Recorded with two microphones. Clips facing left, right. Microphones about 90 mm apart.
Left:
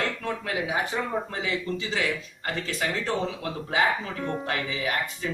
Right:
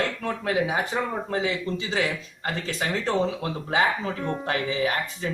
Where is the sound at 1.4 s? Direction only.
30° right (ahead or behind).